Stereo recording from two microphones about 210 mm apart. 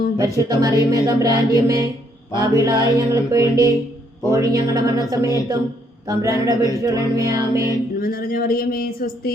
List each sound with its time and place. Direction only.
0.2 s music: 15° right (ahead or behind)
7.9 s speech: 45° left (ahead or behind)